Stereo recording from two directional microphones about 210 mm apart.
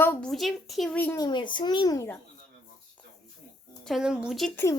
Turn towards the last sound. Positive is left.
turn(degrees=0)  # may be behind; listen again after turning